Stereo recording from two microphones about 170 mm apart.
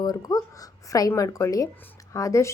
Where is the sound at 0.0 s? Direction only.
20° left (ahead or behind).